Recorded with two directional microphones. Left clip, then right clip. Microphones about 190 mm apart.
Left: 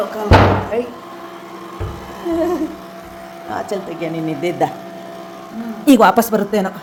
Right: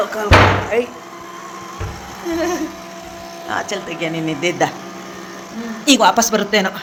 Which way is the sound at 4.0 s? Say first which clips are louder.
Right 3 dB; 10° left (ahead or behind).